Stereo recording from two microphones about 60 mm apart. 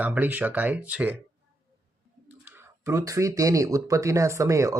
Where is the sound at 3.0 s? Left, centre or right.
Right.